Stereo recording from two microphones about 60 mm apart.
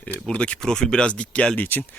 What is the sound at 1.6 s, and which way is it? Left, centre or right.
Speech, left.